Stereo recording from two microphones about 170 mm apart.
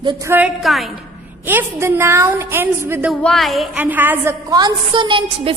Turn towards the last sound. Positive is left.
turn(degrees=-30)  # may be behind; listen again after turning